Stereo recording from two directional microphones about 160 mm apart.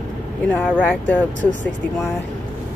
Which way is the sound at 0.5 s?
10° left (ahead or behind).